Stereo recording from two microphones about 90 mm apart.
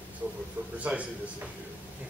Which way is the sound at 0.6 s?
20° right (ahead or behind).